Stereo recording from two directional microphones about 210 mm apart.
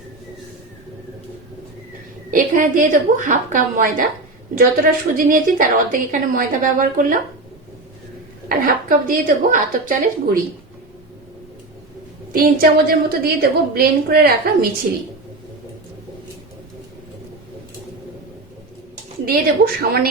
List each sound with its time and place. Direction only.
2.3 s a woman's voice: 40° right (ahead or behind)
8.4 s a woman's voice: 40° right (ahead or behind)
12.3 s a woman's voice: 45° right (ahead or behind)
19.2 s a woman's voice: 45° right (ahead or behind)